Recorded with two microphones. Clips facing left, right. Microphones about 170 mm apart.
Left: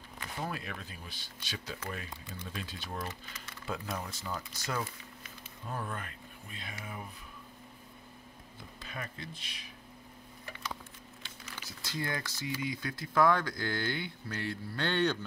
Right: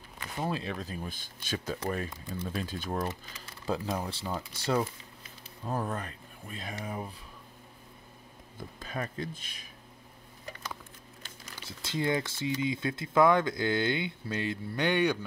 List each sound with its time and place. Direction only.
0.4 s speech: 25° right (ahead or behind); by 3.1 s 50° right (ahead or behind)
3.1 s speech: 30° right (ahead or behind)
8.8 s speech: 40° right (ahead or behind)
11.6 s speech: 25° right (ahead or behind)